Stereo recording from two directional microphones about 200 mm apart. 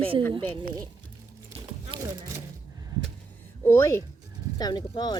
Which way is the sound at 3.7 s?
15° left (ahead or behind).